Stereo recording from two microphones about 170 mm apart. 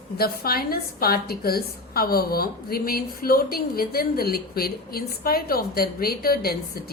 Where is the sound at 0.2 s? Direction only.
65° left (ahead or behind).